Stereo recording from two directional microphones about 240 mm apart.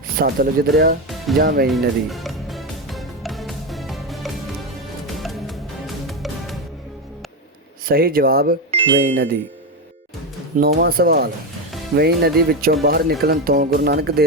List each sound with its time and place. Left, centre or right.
0.2 s speech: right
1.7 s music: centre
7.9 s speech: right
8.7 s music: right
10.6 s speech: right